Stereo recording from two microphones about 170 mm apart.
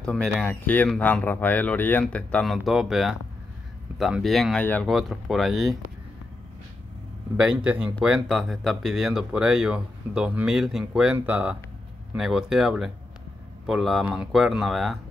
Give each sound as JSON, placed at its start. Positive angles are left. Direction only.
{"t": 0.0, "sound": "speech", "side_deg": 5}
{"t": 7.3, "sound": "a man's voice", "side_deg": -5}